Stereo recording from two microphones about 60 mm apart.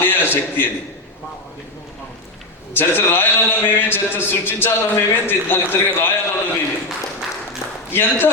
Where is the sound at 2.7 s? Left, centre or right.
Left.